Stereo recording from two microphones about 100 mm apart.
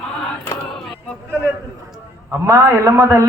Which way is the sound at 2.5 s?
30° right (ahead or behind).